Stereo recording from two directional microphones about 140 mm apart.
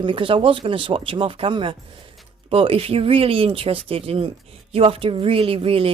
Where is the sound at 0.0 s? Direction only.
35° right (ahead or behind).